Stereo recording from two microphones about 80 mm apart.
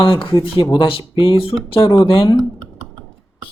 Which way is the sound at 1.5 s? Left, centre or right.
Left.